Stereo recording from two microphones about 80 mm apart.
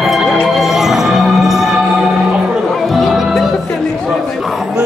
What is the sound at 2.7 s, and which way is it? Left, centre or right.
Music, centre.